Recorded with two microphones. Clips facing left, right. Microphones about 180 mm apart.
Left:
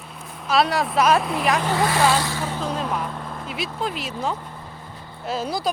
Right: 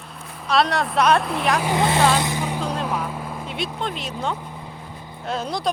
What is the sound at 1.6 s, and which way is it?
Speech, 20° right (ahead or behind).